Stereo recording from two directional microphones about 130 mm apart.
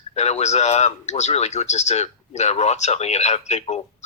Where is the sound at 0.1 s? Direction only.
55° left (ahead or behind).